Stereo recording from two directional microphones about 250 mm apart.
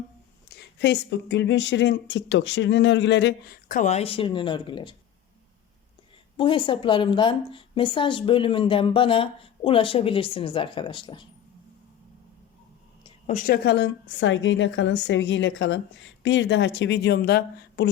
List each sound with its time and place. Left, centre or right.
0.4 s a woman's voice: left; by 4.9 s centre
6.3 s a woman's voice: left
13.2 s a woman's voice: left